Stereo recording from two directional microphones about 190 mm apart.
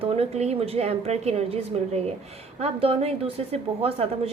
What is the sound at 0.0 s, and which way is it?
A woman's voice, 35° right (ahead or behind).